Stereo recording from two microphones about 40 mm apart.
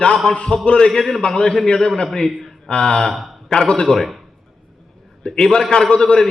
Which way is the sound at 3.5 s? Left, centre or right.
Centre.